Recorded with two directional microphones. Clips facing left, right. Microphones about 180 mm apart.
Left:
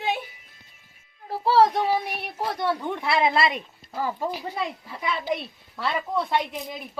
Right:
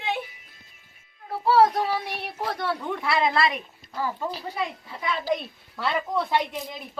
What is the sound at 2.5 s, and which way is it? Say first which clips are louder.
A woman's voice: left 2 dB; 20° left (ahead or behind).